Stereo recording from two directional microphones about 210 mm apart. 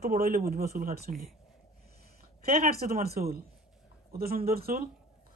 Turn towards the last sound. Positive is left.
turn(degrees=-45)  # may be behind; listen again after turning